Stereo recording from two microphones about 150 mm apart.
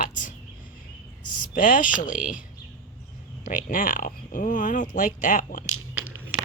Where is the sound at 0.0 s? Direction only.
60° left (ahead or behind).